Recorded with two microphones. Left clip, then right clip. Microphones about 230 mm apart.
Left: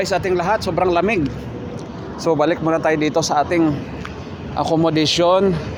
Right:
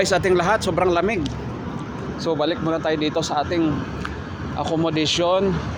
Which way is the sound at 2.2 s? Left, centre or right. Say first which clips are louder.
Left 5 dB; left.